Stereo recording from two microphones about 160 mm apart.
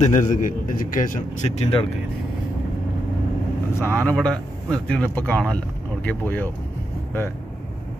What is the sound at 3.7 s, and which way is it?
A man's voice, 15° left (ahead or behind).